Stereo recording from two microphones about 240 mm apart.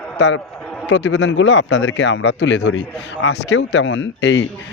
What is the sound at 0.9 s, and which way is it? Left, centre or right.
A man's voice, left.